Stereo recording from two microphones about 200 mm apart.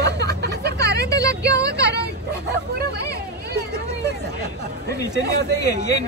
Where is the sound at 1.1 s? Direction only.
15° left (ahead or behind).